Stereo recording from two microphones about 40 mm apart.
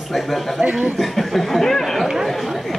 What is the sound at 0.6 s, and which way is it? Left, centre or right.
Speech, right.